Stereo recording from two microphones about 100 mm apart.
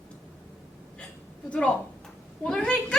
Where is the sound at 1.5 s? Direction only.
10° left (ahead or behind).